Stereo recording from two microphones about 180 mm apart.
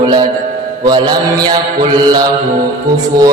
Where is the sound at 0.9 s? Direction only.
25° right (ahead or behind).